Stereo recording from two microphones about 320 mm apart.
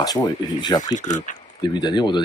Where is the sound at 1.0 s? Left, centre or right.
Left.